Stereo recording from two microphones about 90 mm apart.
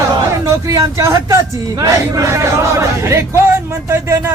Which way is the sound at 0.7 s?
40° right (ahead or behind).